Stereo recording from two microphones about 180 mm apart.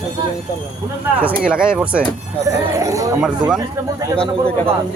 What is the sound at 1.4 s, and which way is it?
Speech, 5° right (ahead or behind).